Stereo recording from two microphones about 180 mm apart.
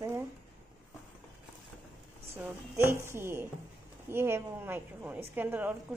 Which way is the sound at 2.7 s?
15° right (ahead or behind).